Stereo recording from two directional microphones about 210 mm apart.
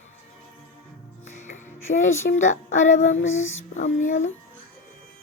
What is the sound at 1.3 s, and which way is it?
Music, 35° left (ahead or behind).